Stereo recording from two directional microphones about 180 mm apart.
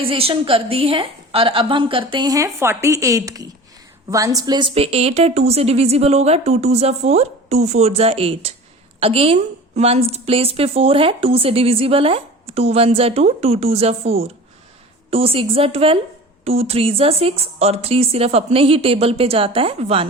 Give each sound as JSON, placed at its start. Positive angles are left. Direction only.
{"t": 0.0, "sound": "a woman's voice", "side_deg": -30}